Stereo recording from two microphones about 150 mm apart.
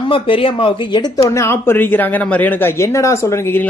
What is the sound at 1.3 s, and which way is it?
Speech, 20° left (ahead or behind).